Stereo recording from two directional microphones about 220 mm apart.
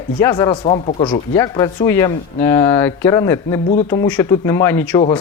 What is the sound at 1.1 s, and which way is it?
Speech, 15° left (ahead or behind).